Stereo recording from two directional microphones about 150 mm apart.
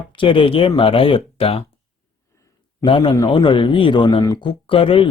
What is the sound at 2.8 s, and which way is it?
A man's voice, 35° left (ahead or behind).